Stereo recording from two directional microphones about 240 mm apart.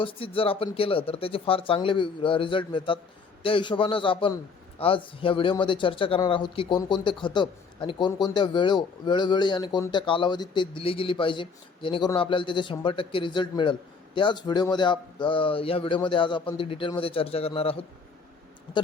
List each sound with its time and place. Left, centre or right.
0.0 s speech: left